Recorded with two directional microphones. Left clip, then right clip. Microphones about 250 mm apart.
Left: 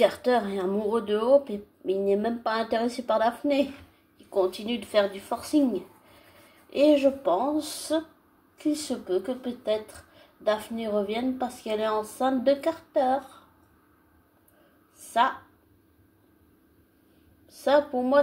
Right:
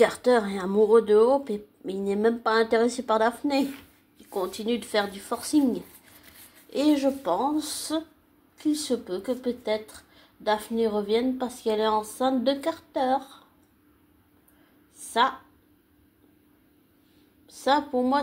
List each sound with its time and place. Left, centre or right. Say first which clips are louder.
0.0 s a woman's voice: right 2 dB; right
6.7 s a woman's voice: left 3 dB; right
17.5 s speech: left 1 dB; right